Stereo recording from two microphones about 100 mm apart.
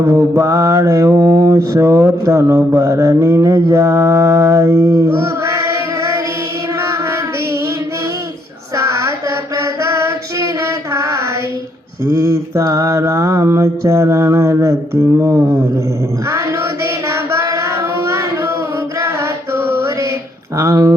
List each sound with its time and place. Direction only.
0.0 s mantra: 30° right (ahead or behind)
6.7 s child singing: 30° right (ahead or behind)
8.7 s female singing: 30° right (ahead or behind)
12.0 s mantra: 30° right (ahead or behind)
16.3 s child singing: 30° right (ahead or behind)
18.9 s mantra: 30° right (ahead or behind)
20.6 s speech: 30° right (ahead or behind)